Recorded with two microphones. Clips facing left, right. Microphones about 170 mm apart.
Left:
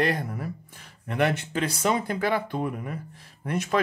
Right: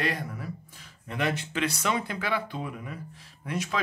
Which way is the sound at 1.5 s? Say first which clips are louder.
Left 3 dB; 45° left (ahead or behind).